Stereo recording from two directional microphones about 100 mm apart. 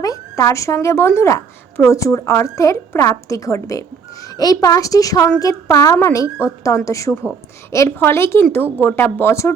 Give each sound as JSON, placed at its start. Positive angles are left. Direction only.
{"t": 0.0, "sound": "a woman's voice", "side_deg": 35}